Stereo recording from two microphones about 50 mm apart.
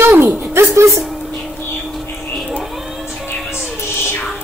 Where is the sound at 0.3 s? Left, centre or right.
Right.